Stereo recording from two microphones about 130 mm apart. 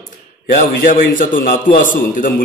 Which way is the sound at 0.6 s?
90° left.